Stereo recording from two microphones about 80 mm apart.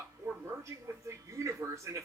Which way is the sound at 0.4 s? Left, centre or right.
Right.